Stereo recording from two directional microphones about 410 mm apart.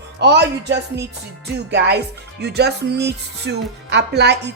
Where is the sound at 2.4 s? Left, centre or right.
Right.